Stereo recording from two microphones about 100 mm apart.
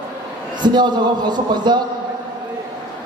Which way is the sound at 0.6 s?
45° right (ahead or behind).